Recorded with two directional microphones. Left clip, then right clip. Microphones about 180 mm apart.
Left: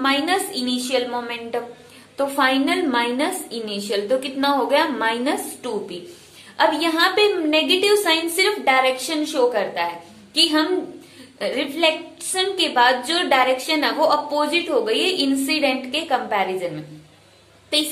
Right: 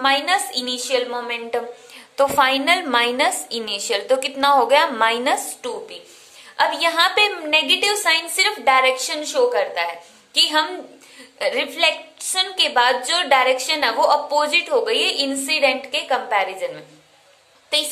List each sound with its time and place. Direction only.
0.0 s a woman's voice: 20° right (ahead or behind)
2.1 s a woman's voice: 35° right (ahead or behind)
5.6 s a woman's voice: 20° right (ahead or behind)